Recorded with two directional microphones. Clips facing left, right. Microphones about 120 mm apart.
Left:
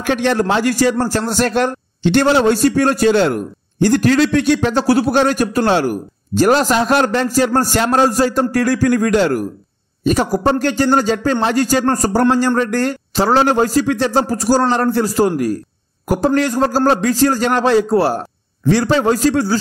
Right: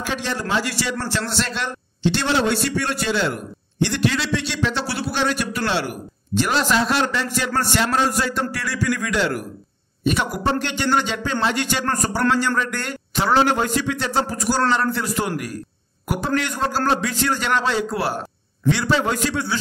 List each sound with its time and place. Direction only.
0.0 s a man's voice: 60° left (ahead or behind); by 19.6 s 40° left (ahead or behind)